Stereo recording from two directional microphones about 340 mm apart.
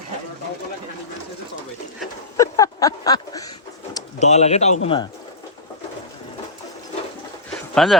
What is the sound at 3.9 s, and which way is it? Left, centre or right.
Speech, centre.